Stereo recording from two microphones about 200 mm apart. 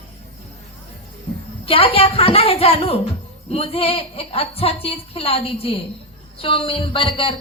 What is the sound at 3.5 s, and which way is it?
Speech, 30° left (ahead or behind).